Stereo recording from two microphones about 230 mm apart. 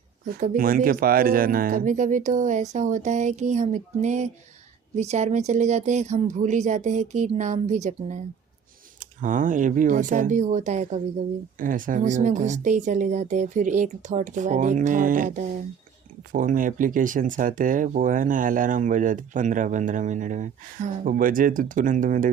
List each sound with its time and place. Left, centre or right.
0.3 s speech: right